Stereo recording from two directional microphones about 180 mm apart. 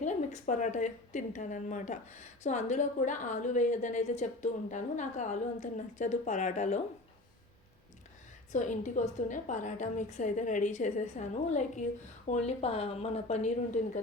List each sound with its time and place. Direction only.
0.0 s a woman's voice: 45° left (ahead or behind)
8.5 s a woman's voice: 45° left (ahead or behind)